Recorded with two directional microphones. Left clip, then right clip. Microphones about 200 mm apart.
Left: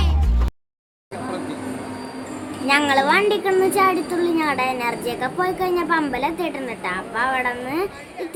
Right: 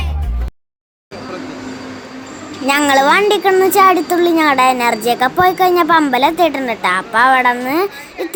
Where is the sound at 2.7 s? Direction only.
40° right (ahead or behind).